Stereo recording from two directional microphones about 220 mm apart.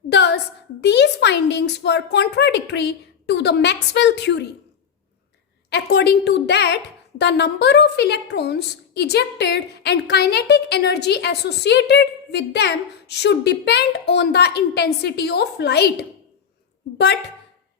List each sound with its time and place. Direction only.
0.1 s a sound: 50° left (ahead or behind)
0.8 s a woman's voice: 50° left (ahead or behind)
5.7 s a woman's voice: 50° left (ahead or behind)